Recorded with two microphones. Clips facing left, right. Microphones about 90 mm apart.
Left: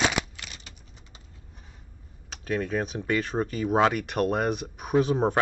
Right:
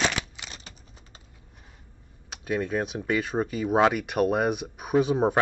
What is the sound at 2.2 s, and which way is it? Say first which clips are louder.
Speech: right 1 dB; 5° right (ahead or behind).